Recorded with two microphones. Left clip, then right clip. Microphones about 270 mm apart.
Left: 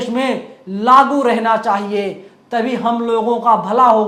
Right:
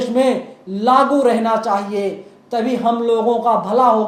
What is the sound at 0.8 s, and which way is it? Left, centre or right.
A man's voice, left.